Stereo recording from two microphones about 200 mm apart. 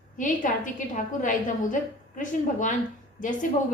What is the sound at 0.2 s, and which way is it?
A woman's voice, 40° left (ahead or behind).